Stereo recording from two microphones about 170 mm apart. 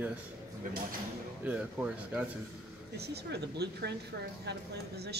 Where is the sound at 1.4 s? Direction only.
10° right (ahead or behind).